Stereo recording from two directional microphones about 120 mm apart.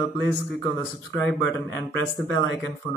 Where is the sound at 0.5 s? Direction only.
30° left (ahead or behind).